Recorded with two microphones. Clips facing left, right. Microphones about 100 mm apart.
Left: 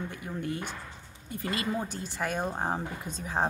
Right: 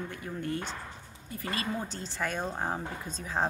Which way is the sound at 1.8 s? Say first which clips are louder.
Left 1 dB; 15° left (ahead or behind).